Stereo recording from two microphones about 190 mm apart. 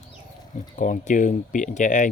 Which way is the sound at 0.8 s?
40° left (ahead or behind).